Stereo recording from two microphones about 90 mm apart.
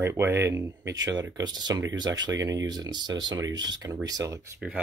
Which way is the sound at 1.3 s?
50° right (ahead or behind).